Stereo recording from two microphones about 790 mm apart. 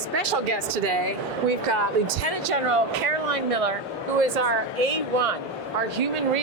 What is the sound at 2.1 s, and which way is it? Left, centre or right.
Speech, right.